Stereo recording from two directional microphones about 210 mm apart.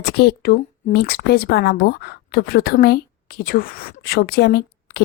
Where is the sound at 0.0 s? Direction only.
50° left (ahead or behind).